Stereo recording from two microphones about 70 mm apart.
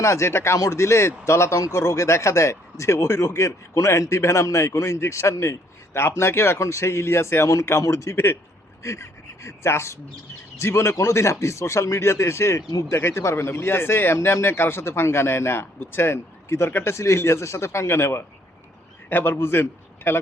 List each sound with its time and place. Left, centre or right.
0.0 s speech: left